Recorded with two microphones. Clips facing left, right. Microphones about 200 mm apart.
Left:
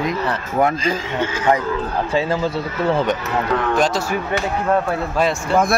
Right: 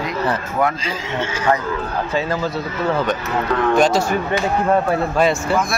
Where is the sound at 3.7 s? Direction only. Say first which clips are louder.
Right 6 dB; centre (ahead or behind).